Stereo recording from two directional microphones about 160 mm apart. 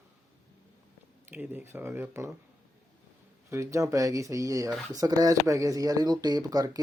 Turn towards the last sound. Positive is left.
turn(degrees=-25)  # may be behind; listen again after turning